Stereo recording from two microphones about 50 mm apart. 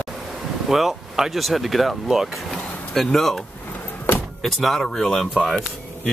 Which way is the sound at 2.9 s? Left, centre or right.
Centre.